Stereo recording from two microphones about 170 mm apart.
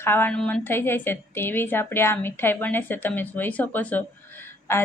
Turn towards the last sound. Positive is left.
turn(degrees=15)  # may be behind; listen again after turning